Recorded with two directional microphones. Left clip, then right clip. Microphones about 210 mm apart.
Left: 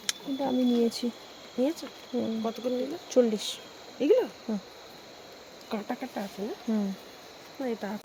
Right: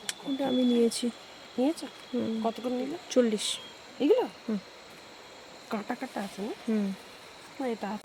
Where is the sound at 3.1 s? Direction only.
10° right (ahead or behind).